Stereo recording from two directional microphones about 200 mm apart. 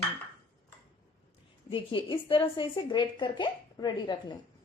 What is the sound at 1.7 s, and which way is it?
A woman's voice, 25° left (ahead or behind).